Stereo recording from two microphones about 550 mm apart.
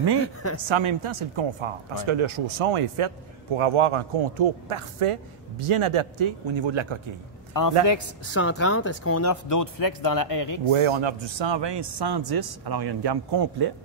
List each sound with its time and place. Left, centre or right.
0.2 s speech: left
0.7 s a woman's voice: right
7.8 s speech: left
8.4 s speech: left
10.7 s a man's voice: right